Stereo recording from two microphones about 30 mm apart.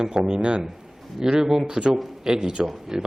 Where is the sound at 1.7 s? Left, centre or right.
Right.